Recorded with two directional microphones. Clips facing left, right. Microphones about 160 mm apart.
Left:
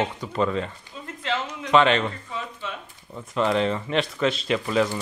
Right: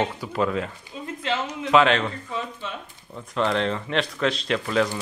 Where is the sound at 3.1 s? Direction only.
5° left (ahead or behind).